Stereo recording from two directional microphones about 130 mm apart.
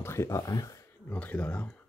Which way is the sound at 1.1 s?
10° left (ahead or behind).